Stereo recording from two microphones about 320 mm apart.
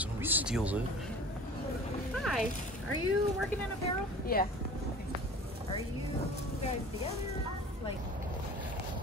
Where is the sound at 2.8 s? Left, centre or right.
Left.